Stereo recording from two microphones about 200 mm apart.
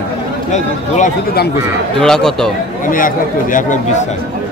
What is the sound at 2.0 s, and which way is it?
Speech, 5° left (ahead or behind).